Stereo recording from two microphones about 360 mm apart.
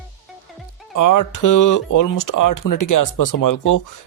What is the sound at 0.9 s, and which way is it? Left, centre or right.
Speech, left.